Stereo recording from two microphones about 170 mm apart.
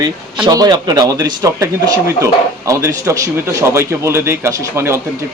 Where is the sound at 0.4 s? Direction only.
25° right (ahead or behind).